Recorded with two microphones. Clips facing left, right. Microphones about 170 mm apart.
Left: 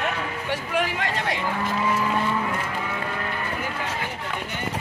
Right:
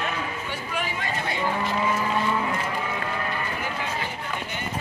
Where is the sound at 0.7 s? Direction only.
75° left (ahead or behind).